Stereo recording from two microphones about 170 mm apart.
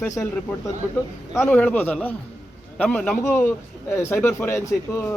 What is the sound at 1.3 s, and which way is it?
Speech, 15° left (ahead or behind).